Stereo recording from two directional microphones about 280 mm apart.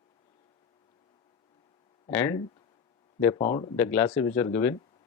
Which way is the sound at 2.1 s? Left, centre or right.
Centre.